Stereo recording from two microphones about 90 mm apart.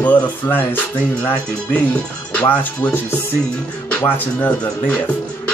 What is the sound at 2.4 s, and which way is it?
Speech, 20° left (ahead or behind).